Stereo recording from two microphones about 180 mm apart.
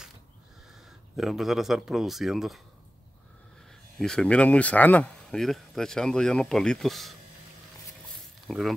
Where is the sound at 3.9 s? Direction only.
5° left (ahead or behind).